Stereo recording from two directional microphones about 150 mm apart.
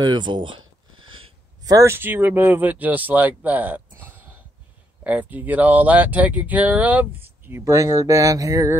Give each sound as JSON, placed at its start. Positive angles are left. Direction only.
{"t": 0.0, "sound": "speech", "side_deg": -30}
{"t": 1.6, "sound": "speech", "side_deg": -25}
{"t": 5.0, "sound": "speech", "side_deg": -10}